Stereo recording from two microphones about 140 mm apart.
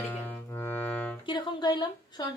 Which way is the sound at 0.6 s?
15° left (ahead or behind).